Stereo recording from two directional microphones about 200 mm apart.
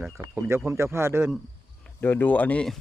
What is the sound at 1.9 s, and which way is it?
Speech, 10° left (ahead or behind).